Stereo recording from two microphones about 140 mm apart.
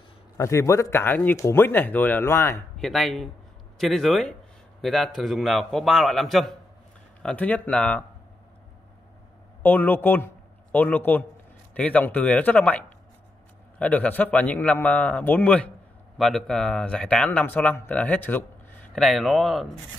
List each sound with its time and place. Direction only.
0.4 s speech: 20° left (ahead or behind)
2.8 s a man's voice: centre (ahead or behind)
7.2 s speech: 10° left (ahead or behind)
9.6 s speech: 15° left (ahead or behind)
18.9 s a man's voice: centre (ahead or behind)